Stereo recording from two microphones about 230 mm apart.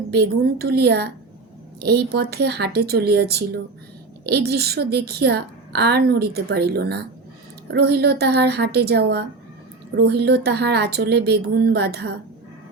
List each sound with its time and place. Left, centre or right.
0.1 s a woman's voice: right